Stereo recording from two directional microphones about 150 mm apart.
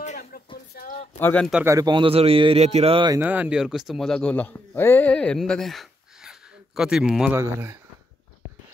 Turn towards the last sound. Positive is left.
turn(degrees=-15)  # may be behind; listen again after turning